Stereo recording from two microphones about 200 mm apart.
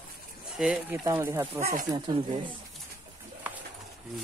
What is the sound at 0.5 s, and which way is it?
Stir, 5° right (ahead or behind).